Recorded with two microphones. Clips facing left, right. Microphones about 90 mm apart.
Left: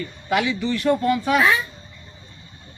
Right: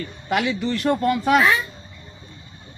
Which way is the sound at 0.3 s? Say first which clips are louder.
Even; 50° right (ahead or behind).